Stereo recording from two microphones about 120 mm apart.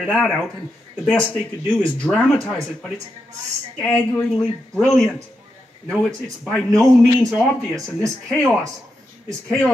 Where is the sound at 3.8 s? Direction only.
5° left (ahead or behind).